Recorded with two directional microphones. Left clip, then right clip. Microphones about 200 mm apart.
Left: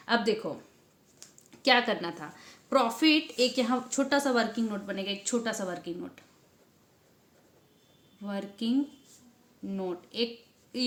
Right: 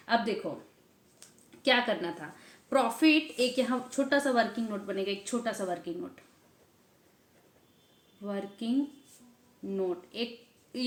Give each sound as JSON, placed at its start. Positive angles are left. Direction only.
{"t": 0.0, "sound": "a sound", "side_deg": 45}
{"t": 1.5, "sound": "a woman's voice", "side_deg": 40}
{"t": 8.2, "sound": "a woman's voice", "side_deg": 35}